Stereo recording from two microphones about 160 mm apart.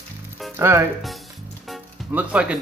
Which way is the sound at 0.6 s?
15° right (ahead or behind).